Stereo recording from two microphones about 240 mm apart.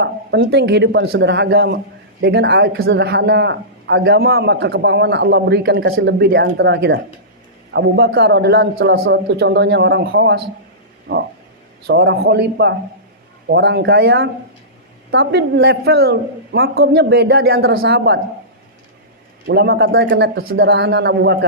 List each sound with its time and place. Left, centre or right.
0.0 s a man's voice: right
19.5 s a man's voice: right